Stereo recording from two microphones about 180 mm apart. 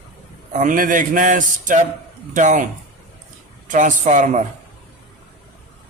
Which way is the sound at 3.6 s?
45° right (ahead or behind).